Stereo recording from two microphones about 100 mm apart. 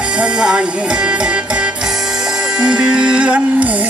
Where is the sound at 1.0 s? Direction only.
10° right (ahead or behind).